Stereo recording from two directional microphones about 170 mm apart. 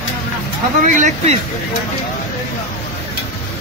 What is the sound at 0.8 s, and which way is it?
Speech, 45° right (ahead or behind).